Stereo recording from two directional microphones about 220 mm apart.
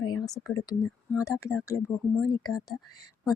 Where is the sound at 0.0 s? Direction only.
20° left (ahead or behind).